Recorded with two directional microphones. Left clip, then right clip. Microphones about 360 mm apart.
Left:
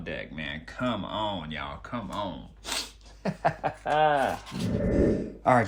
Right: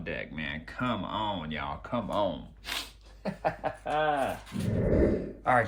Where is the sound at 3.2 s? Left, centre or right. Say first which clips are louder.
Left 3 dB; left.